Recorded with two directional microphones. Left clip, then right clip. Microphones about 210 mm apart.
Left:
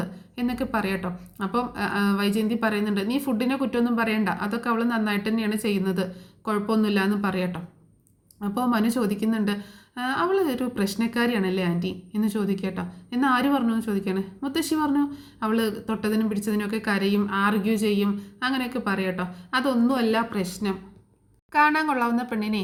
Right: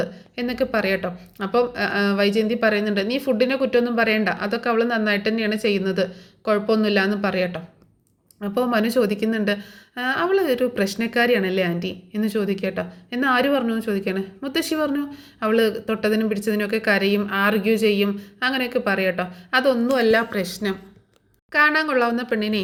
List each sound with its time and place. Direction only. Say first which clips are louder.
0.0 s a woman's voice: right 5 dB; 15° right (ahead or behind)
21.5 s a woman's voice: right 3 dB; 5° right (ahead or behind)